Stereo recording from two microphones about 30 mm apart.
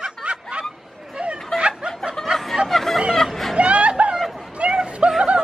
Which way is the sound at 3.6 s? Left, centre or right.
Right.